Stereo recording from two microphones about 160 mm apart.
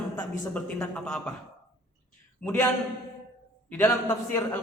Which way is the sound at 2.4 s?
15° left (ahead or behind).